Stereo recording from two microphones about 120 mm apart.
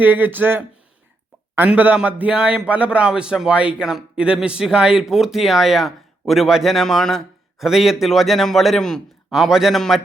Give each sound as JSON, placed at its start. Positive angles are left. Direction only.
{"t": 0.0, "sound": "a man's voice", "side_deg": -15}